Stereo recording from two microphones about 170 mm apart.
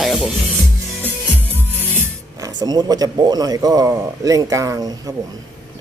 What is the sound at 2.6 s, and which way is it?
A man's voice, 25° right (ahead or behind).